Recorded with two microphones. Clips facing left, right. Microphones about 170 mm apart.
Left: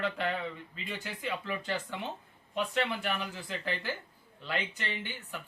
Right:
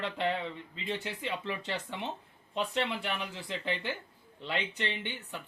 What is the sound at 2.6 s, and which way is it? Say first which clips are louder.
Speech: even; 25° right (ahead or behind).